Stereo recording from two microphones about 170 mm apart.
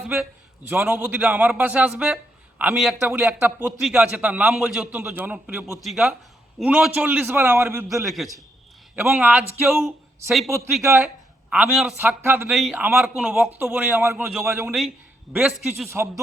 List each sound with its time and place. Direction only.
0.0 s a man's voice: 5° right (ahead or behind)
8.0 s a man's voice: centre (ahead or behind)
9.0 s a man's voice: 10° right (ahead or behind)
12.5 s a man's voice: centre (ahead or behind)